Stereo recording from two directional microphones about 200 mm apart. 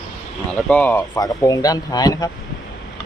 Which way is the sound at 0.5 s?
5° left (ahead or behind).